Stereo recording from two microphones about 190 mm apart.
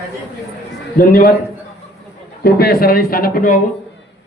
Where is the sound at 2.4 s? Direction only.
55° left (ahead or behind).